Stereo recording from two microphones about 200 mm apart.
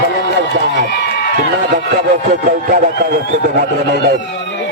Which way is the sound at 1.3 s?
55° right (ahead or behind).